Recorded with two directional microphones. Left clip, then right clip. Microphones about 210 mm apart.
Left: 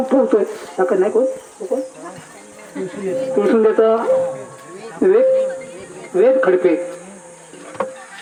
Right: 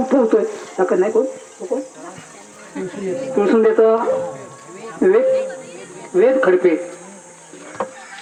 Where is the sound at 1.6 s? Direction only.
25° right (ahead or behind).